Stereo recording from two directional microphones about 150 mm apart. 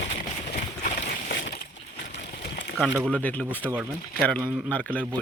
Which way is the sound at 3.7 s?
5° right (ahead or behind).